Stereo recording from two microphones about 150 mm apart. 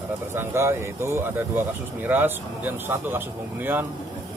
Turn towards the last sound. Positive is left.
turn(degrees=-15)  # may be behind; listen again after turning